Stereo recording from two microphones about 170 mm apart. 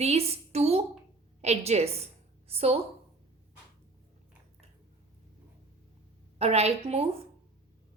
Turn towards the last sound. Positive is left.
turn(degrees=-35)  # may be behind; listen again after turning